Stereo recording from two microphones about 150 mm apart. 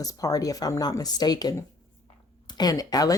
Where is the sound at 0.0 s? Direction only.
25° left (ahead or behind).